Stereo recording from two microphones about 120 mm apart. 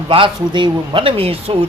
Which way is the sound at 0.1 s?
45° right (ahead or behind).